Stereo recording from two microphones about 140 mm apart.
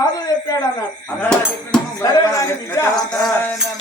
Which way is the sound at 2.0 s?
25° left (ahead or behind).